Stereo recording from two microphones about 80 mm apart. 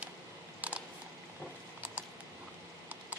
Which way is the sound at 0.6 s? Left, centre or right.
Centre.